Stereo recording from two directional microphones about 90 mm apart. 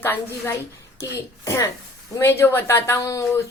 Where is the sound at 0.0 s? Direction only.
25° left (ahead or behind).